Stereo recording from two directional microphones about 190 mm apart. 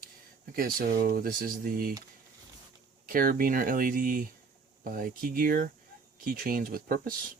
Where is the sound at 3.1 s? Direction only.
50° right (ahead or behind).